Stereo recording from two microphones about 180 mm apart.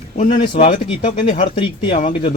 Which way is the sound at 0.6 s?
40° left (ahead or behind).